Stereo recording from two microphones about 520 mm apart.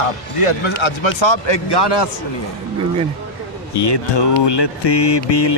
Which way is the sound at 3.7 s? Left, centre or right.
Left.